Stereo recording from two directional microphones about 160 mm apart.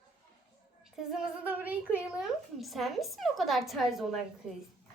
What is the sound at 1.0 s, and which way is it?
A woman's voice, 5° right (ahead or behind).